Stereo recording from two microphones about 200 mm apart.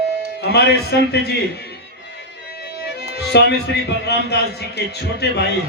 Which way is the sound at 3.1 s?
55° left (ahead or behind).